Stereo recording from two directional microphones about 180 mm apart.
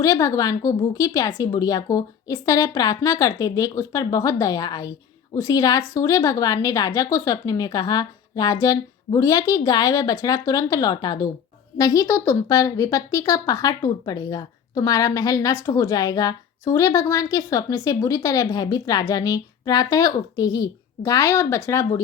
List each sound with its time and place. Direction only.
0.0 s a woman's voice: 20° left (ahead or behind)